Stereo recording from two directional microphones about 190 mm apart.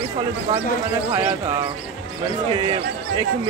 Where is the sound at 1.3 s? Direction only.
30° right (ahead or behind).